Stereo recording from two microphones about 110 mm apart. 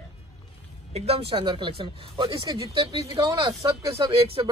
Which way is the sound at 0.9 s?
65° right (ahead or behind).